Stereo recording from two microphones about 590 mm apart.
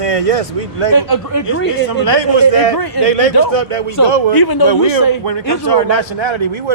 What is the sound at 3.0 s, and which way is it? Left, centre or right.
Speech, right.